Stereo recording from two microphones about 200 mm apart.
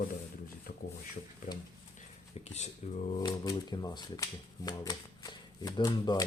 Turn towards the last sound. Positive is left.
turn(degrees=20)  # may be behind; listen again after turning